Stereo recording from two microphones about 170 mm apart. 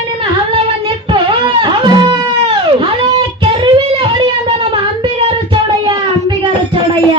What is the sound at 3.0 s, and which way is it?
Guitar, 25° right (ahead or behind).